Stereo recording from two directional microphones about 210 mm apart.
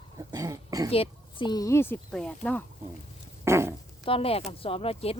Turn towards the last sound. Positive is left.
turn(degrees=30)  # may be behind; listen again after turning